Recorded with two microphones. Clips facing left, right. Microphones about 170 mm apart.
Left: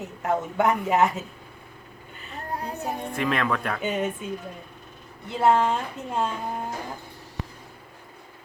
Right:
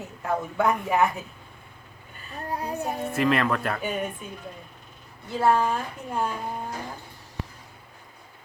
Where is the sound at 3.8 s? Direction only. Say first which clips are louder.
Left 3 dB; 20° left (ahead or behind).